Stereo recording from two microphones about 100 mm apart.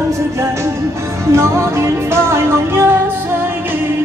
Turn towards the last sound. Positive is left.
turn(degrees=-25)  # may be behind; listen again after turning